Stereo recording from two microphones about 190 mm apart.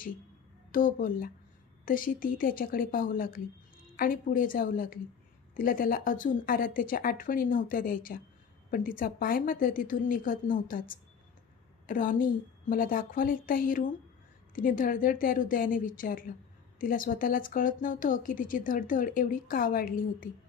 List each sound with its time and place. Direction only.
0.7 s speech: 45° left (ahead or behind)